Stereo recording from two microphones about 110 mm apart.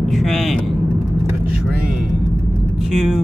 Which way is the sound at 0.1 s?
Centre (ahead or behind).